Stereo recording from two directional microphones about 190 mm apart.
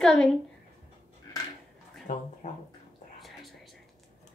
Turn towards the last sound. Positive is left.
turn(degrees=0)  # may be behind; listen again after turning